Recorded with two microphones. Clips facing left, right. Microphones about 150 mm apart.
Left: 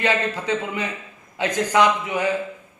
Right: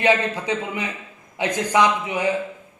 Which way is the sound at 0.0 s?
15° right (ahead or behind).